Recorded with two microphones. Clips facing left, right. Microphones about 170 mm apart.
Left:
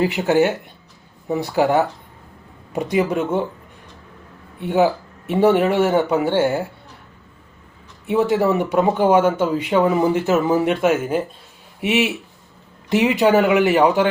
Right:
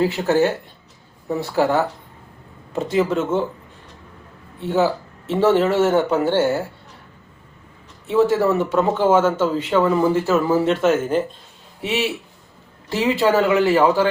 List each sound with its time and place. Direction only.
0.0 s speech: 15° left (ahead or behind)
4.6 s speech: 15° left (ahead or behind)
8.0 s speech: 15° left (ahead or behind)